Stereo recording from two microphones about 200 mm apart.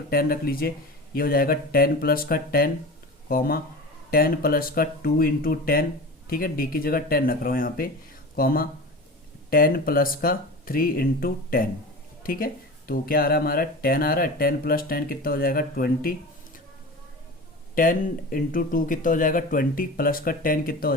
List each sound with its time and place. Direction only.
0.1 s speech: 45° left (ahead or behind)
17.7 s speech: 40° left (ahead or behind)